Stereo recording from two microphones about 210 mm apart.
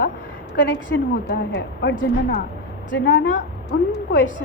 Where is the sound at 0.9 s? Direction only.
50° left (ahead or behind).